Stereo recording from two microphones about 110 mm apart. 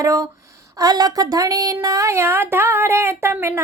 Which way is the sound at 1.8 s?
30° right (ahead or behind).